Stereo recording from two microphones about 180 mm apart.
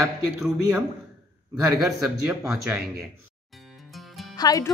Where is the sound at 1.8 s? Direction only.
Centre (ahead or behind).